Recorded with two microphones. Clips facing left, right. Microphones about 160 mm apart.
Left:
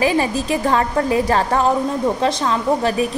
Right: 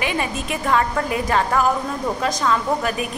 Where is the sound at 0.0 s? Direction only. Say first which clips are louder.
Left 6 dB; 35° left (ahead or behind).